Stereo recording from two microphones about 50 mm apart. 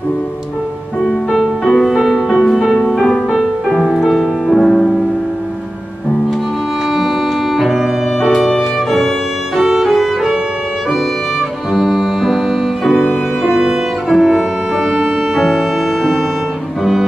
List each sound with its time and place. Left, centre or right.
1.3 s music: centre
7.5 s music: centre
9.6 s music: centre
11.8 s music: centre
13.0 s music: centre